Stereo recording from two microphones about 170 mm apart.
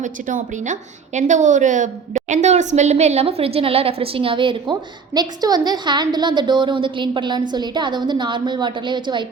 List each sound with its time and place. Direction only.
0.0 s a woman's voice: 50° right (ahead or behind); by 9.2 s 25° right (ahead or behind)